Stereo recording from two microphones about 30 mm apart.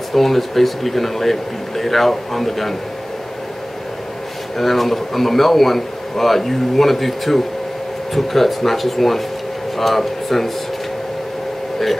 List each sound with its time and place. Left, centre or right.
0.1 s a man's voice: centre
4.6 s a man's voice: centre